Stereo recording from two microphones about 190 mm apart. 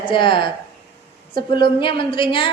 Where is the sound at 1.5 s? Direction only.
25° left (ahead or behind).